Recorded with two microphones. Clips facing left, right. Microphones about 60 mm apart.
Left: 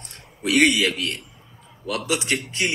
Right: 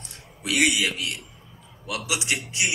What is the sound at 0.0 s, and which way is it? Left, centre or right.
A man's voice, left.